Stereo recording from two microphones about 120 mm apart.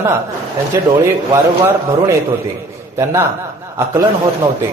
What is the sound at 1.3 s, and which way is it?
Speech, 25° right (ahead or behind).